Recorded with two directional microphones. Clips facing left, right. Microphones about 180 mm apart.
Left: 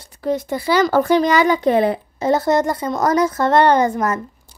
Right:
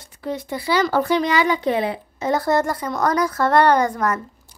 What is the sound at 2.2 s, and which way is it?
Speech, 25° left (ahead or behind).